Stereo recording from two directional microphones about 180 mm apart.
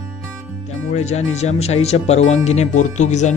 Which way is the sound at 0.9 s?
40° left (ahead or behind).